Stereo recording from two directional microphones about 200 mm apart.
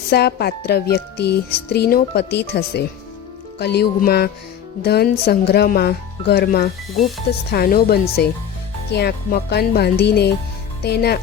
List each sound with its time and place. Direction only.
0.1 s speech: 55° left (ahead or behind)